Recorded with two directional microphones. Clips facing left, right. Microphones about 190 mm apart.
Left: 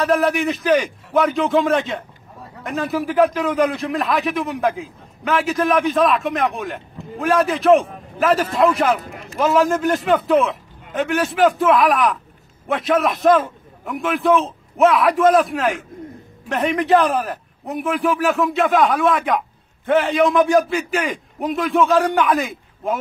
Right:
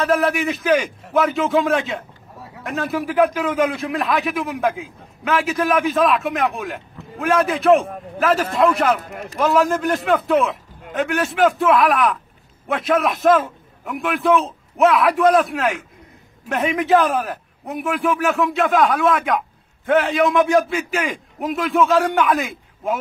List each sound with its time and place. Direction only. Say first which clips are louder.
0.0 s a man's voice: left 1 dB; centre (ahead or behind)
9.1 s speech: right 4 dB; 40° right (ahead or behind)
9.4 s a man's voice: left 1 dB; centre (ahead or behind)